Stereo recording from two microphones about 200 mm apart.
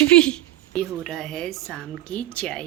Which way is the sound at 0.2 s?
5° left (ahead or behind).